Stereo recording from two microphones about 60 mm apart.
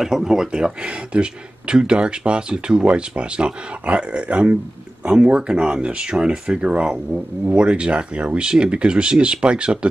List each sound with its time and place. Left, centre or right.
0.0 s speech: centre